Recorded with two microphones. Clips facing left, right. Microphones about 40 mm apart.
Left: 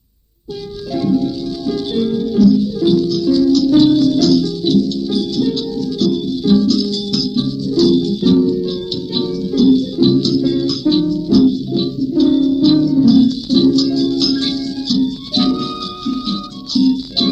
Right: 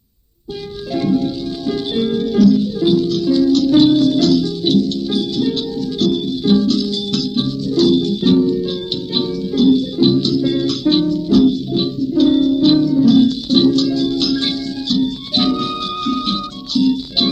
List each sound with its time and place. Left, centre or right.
0.9 s music: right
2.1 s music: right
2.8 s music: right
4.3 s music: right
4.6 s music: right
10.5 s music: right
12.7 s music: right
13.1 s music: right
16.0 s music: right
16.7 s music: right